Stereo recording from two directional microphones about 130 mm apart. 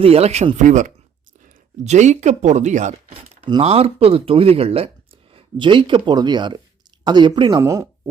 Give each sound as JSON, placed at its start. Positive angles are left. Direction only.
{"t": 0.0, "sound": "speech", "side_deg": -50}
{"t": 0.5, "sound": "speech", "side_deg": -70}
{"t": 1.8, "sound": "speech", "side_deg": -60}
{"t": 3.4, "sound": "speech", "side_deg": -45}
{"t": 5.3, "sound": "speech", "side_deg": -40}
{"t": 7.6, "sound": "speech", "side_deg": -25}